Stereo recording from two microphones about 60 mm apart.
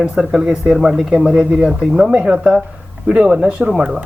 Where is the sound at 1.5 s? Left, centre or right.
Centre.